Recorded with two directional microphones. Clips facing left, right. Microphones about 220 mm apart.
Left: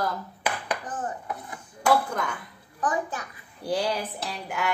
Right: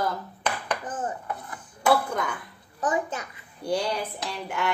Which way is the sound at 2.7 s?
25° right (ahead or behind).